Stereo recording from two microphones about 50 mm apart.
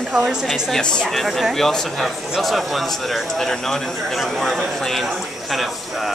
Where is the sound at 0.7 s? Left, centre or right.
Centre.